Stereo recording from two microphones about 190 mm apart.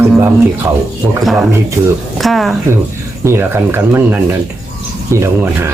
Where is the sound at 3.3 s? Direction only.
10° right (ahead or behind).